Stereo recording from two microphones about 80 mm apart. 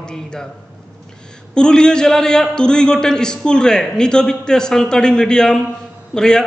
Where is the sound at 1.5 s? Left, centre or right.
Centre.